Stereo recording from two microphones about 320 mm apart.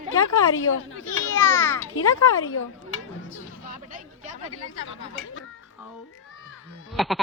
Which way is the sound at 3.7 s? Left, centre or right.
Right.